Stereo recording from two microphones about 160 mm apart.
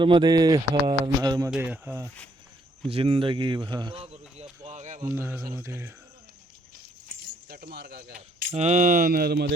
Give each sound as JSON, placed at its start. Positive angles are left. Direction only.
{"t": 0.0, "sound": "speech", "side_deg": -30}
{"t": 1.5, "sound": "speech", "side_deg": -10}
{"t": 2.9, "sound": "speech", "side_deg": -35}
{"t": 4.6, "sound": "a sound", "side_deg": -45}
{"t": 5.1, "sound": "speech", "side_deg": -15}
{"t": 6.7, "sound": "keys jangling", "side_deg": -90}
{"t": 8.5, "sound": "speech", "side_deg": -45}